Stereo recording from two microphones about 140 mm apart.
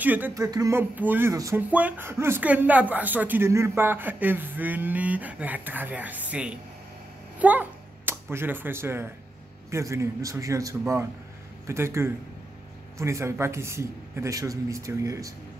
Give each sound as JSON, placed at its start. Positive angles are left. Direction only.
{"t": 0.0, "sound": "speech", "side_deg": -10}
{"t": 0.3, "sound": "speech", "side_deg": -25}
{"t": 1.3, "sound": "speech", "side_deg": -25}
{"t": 1.7, "sound": "speech", "side_deg": -10}